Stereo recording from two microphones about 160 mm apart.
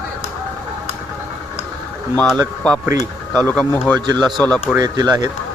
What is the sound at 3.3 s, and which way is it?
Speech, 10° left (ahead or behind).